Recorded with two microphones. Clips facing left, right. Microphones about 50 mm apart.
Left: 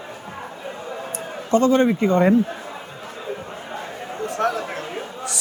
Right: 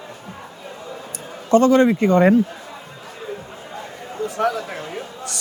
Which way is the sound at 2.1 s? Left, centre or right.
Right.